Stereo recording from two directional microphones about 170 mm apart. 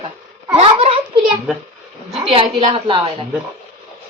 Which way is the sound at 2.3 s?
30° right (ahead or behind).